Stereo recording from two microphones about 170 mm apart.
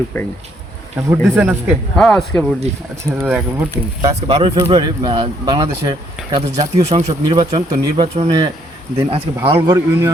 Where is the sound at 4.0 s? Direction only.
35° right (ahead or behind).